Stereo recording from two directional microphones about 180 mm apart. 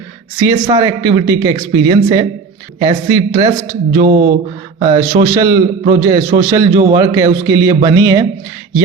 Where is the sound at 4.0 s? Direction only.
50° right (ahead or behind).